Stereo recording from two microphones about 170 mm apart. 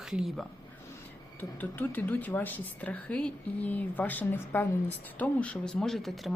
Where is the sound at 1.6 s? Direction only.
10° left (ahead or behind).